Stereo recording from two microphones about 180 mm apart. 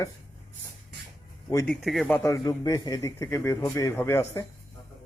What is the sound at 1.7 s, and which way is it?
Speech, centre (ahead or behind).